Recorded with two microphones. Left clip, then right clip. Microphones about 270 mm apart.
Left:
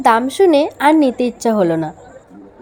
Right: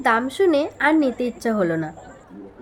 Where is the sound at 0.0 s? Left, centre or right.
Centre.